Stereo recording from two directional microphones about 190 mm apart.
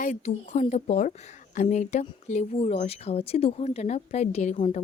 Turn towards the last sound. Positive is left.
turn(degrees=40)  # may be behind; listen again after turning